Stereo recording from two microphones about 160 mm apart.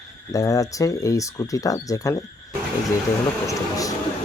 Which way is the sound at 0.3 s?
20° left (ahead or behind).